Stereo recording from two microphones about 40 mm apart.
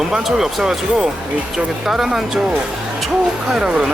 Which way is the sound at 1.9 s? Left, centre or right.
Centre.